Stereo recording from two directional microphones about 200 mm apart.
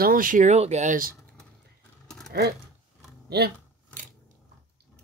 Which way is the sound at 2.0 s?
5° left (ahead or behind).